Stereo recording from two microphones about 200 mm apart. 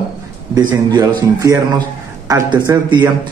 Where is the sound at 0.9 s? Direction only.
15° right (ahead or behind).